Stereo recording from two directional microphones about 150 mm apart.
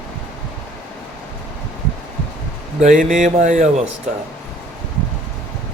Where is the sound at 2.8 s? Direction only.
60° right (ahead or behind).